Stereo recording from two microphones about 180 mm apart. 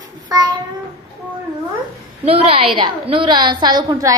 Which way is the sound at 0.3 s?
20° right (ahead or behind).